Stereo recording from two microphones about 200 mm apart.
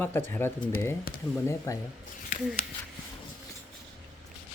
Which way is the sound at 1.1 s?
45° left (ahead or behind).